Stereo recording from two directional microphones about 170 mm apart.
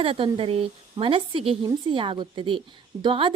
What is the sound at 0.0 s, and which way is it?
A woman's voice, 30° right (ahead or behind).